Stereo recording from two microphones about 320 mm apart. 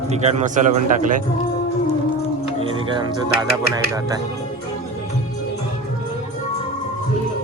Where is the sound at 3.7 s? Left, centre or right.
Centre.